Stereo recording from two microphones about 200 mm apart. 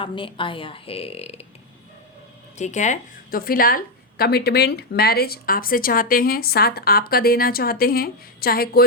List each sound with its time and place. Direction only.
0.0 s a woman's voice: 25° left (ahead or behind)
2.6 s a woman's voice: 35° left (ahead or behind)